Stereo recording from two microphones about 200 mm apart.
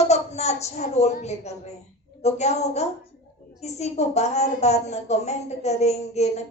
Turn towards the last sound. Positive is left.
turn(degrees=35)  # may be behind; listen again after turning